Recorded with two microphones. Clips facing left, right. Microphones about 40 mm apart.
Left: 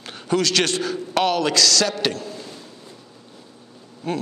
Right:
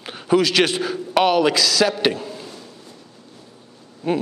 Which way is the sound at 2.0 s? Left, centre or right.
Centre.